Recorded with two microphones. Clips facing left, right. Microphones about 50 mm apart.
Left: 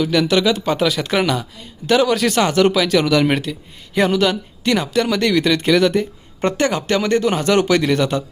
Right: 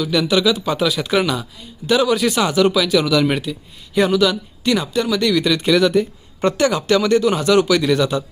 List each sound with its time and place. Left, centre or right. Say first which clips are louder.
0.0 s speech: left 1 dB; left